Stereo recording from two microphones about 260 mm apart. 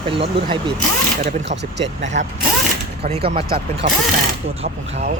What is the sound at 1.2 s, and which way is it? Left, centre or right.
Speech, right.